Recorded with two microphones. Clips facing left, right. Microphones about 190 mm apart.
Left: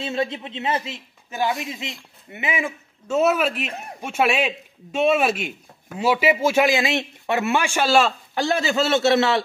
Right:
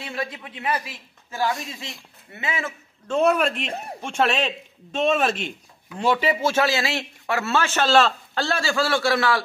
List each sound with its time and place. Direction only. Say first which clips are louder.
0.0 s a man's voice: left 6 dB; 25° left (ahead or behind)